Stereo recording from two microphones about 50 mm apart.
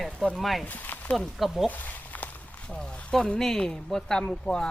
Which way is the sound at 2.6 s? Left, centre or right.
Centre.